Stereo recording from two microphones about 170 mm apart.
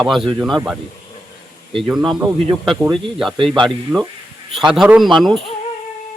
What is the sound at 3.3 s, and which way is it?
Speech, 30° right (ahead or behind).